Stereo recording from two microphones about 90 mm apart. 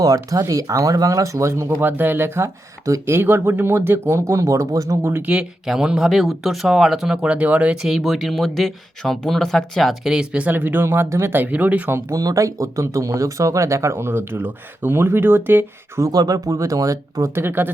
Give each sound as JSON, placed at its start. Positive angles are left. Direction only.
{"t": 0.0, "sound": "speech", "side_deg": -40}
{"t": 5.1, "sound": "speech", "side_deg": -15}
{"t": 12.1, "sound": "speech", "side_deg": -35}
{"t": 16.0, "sound": "speech", "side_deg": -45}